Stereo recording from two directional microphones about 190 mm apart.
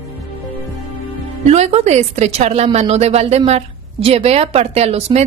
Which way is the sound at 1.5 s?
35° right (ahead or behind).